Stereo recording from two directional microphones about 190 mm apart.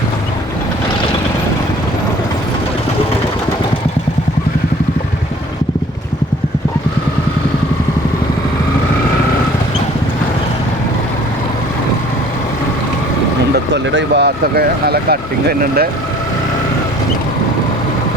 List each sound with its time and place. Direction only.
13.9 s speech: 60° right (ahead or behind)